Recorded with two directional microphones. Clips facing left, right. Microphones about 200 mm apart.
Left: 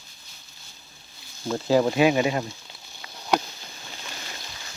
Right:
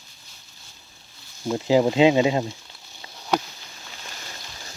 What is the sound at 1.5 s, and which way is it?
Speech, 15° right (ahead or behind).